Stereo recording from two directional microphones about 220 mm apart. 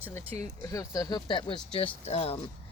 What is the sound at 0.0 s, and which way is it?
Speech, 10° left (ahead or behind).